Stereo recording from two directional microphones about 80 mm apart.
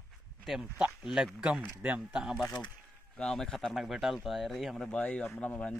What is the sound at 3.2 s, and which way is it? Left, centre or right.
A man's voice, centre.